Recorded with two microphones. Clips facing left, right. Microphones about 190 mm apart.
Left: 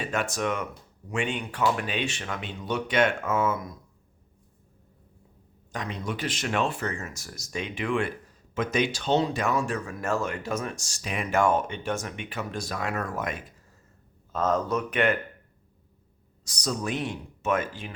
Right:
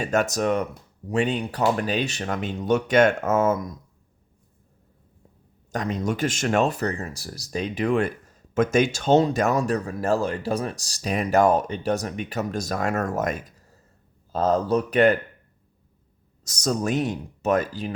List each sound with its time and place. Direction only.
0.0 s speech: 45° right (ahead or behind)
5.7 s speech: 45° right (ahead or behind)
16.4 s speech: 45° right (ahead or behind)